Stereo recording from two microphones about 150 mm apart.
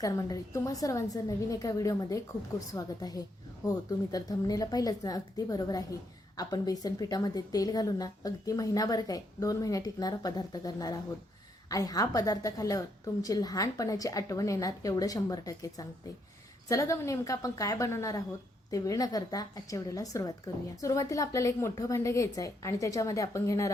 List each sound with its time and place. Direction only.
0.0 s a woman's voice: 20° left (ahead or behind)